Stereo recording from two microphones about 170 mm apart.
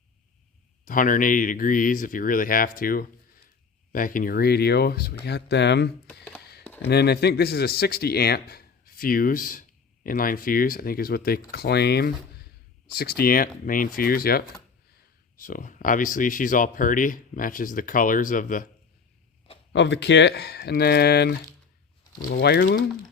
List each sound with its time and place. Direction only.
0.9 s speech: 50° left (ahead or behind); by 5.9 s 90° left
6.1 s a sound: 10° left (ahead or behind)
6.8 s speech: 75° left (ahead or behind); by 18.7 s 50° left (ahead or behind)
19.7 s speech: 90° left; by 22.8 s 65° left (ahead or behind)